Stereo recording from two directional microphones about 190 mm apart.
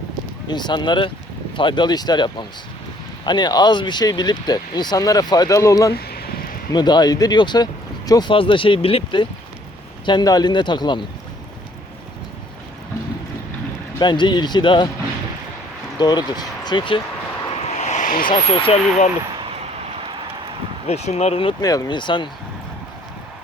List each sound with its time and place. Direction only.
0.4 s speech: 25° left (ahead or behind)
5.9 s a sound: 55° left (ahead or behind)
6.7 s speech: 20° left (ahead or behind)
14.0 s speech: 25° left (ahead or behind)
16.0 s speech: 20° left (ahead or behind)
17.7 s vehicle: 35° left (ahead or behind)
18.4 s speech: 30° left (ahead or behind)
19.2 s a sound: 25° right (ahead or behind)
20.8 s speech: 35° left (ahead or behind)